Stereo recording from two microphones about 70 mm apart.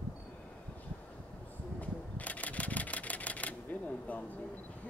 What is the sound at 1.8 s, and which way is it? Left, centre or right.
Camera, left.